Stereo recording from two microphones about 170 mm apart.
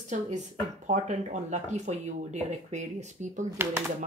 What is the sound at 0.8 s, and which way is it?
Speech, 45° right (ahead or behind).